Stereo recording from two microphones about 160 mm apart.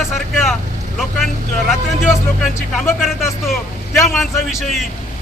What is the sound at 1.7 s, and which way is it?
Speech, centre (ahead or behind).